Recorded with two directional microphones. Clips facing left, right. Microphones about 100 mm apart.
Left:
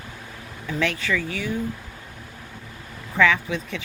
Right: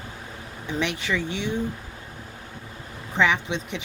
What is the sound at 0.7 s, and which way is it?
Speech, 20° right (ahead or behind).